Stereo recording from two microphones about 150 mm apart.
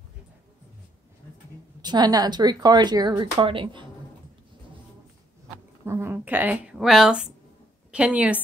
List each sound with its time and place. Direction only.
1.8 s speech: 30° right (ahead or behind)
5.9 s a woman's voice: 15° right (ahead or behind)